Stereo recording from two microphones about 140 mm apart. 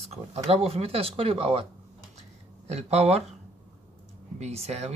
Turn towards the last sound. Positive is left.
turn(degrees=-50)  # may be behind; listen again after turning